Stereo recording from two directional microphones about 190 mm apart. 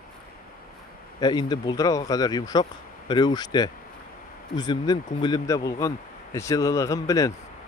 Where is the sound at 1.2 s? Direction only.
20° left (ahead or behind).